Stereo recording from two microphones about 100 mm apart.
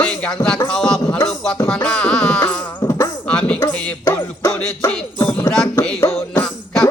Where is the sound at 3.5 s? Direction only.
20° left (ahead or behind).